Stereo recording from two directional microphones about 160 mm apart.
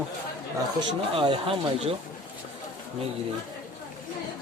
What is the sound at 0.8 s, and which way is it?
Speech, 35° right (ahead or behind).